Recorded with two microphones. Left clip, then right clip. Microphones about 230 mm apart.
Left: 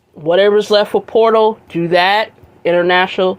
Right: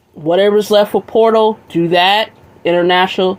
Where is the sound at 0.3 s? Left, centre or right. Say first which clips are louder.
Even; centre.